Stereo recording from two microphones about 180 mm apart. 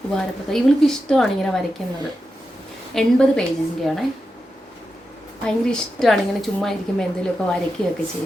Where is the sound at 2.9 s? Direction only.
5° left (ahead or behind).